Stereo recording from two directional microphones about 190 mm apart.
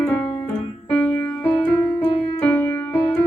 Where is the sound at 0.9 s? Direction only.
5° left (ahead or behind).